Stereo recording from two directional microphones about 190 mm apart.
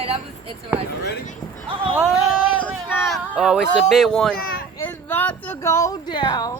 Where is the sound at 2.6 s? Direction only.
5° right (ahead or behind); by 6.5 s 20° left (ahead or behind).